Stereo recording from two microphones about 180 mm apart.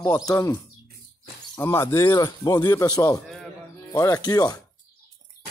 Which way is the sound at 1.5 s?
15° left (ahead or behind).